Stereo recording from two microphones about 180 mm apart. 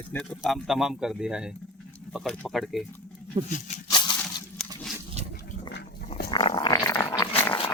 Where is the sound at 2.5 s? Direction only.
Centre (ahead or behind).